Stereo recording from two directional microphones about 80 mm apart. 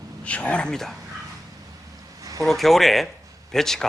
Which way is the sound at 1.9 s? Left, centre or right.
Right.